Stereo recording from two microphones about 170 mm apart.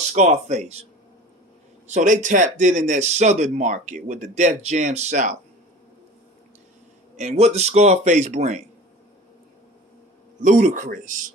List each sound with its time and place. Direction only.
0.1 s speech: 45° right (ahead or behind)
1.9 s speech: 45° right (ahead or behind)
7.2 s speech: 40° right (ahead or behind)
10.4 s speech: 45° right (ahead or behind)